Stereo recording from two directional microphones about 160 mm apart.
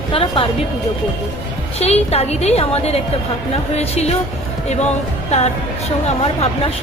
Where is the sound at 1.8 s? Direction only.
40° left (ahead or behind).